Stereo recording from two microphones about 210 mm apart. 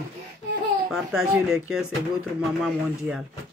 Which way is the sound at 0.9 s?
Centre (ahead or behind).